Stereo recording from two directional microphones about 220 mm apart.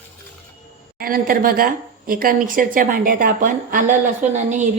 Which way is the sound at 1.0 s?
40° right (ahead or behind).